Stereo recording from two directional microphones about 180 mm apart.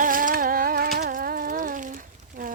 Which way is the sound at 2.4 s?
50° right (ahead or behind).